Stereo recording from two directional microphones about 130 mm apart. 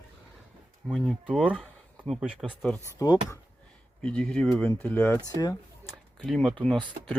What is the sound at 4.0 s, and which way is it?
Speech, 10° left (ahead or behind).